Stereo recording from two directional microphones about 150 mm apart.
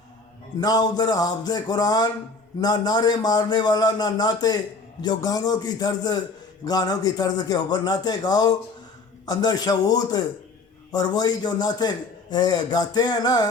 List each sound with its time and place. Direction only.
0.6 s a man's voice: 25° left (ahead or behind)